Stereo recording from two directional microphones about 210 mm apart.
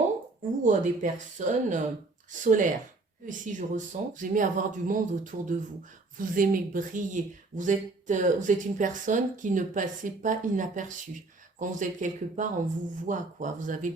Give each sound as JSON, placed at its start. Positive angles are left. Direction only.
{"t": 0.6, "sound": "speech", "side_deg": -35}